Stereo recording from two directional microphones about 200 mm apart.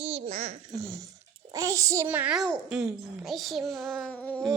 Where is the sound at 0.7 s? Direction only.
15° right (ahead or behind).